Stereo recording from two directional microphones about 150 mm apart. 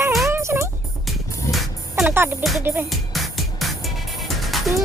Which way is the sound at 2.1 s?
15° right (ahead or behind).